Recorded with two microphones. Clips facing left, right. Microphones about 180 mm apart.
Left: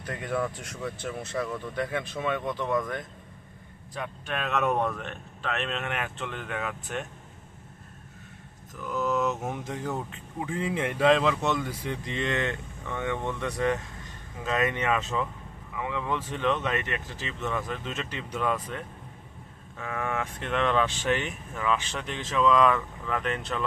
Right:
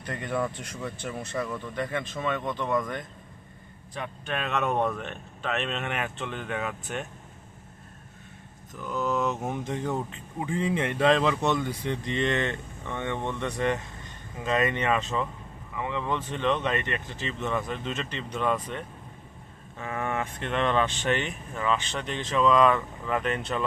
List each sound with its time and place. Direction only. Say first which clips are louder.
0.0 s speech: even; centre (ahead or behind)
8.7 s speech: even; 5° left (ahead or behind)
19.8 s speech: right 1 dB; centre (ahead or behind)